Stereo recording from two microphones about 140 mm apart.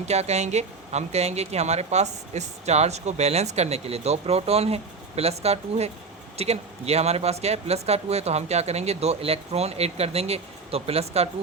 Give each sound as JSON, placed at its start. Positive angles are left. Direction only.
{"t": 0.0, "sound": "speech", "side_deg": -50}